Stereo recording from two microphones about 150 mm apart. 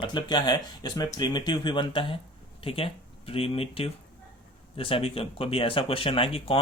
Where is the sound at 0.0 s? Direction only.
30° left (ahead or behind).